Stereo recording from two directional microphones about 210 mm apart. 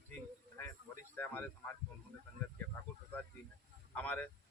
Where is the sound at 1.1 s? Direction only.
10° left (ahead or behind).